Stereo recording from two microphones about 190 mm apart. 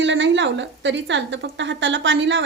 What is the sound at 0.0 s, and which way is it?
Speech, 70° right (ahead or behind).